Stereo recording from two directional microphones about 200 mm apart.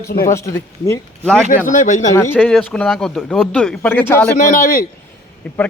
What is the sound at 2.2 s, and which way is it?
Speech, 10° left (ahead or behind).